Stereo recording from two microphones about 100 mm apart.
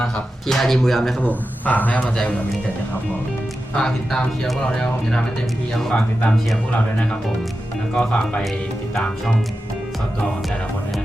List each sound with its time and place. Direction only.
0.0 s speech: 5° left (ahead or behind)
1.2 s speech: 15° left (ahead or behind)
3.8 s speech: 5° left (ahead or behind)
5.9 s speech: 10° left (ahead or behind)
7.9 s speech: 10° left (ahead or behind)